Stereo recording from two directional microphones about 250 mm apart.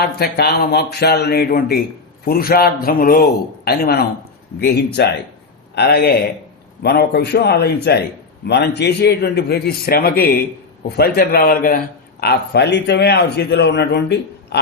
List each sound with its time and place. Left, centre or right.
0.2 s a man's voice: left